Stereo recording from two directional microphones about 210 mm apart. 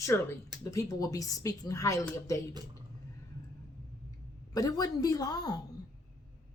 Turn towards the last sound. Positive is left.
turn(degrees=20)  # may be behind; listen again after turning